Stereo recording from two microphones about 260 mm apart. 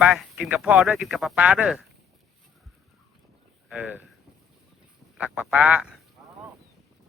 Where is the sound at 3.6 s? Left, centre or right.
Centre.